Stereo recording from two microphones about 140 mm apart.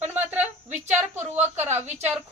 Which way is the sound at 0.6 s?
55° right (ahead or behind).